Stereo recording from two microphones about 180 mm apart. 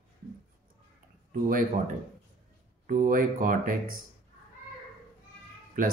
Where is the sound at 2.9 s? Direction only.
50° right (ahead or behind).